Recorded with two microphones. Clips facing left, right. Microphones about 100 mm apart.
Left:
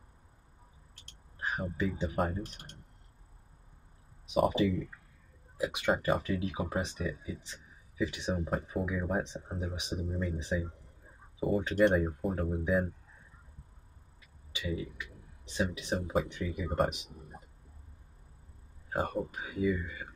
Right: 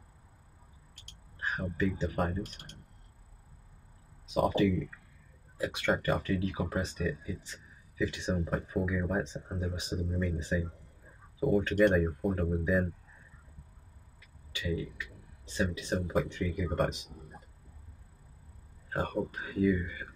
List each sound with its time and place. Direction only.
1.4 s speech: 15° left (ahead or behind)
2.1 s speech: 5° left (ahead or behind)
4.3 s speech: 20° left (ahead or behind)
14.5 s a sound: 15° left (ahead or behind)
15.7 s speech: 15° left (ahead or behind)
18.9 s speech: 15° left (ahead or behind)